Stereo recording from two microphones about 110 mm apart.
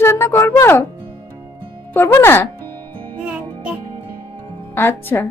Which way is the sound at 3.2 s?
10° right (ahead or behind).